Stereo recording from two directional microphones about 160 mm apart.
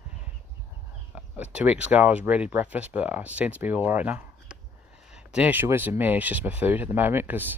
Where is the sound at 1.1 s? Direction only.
10° right (ahead or behind).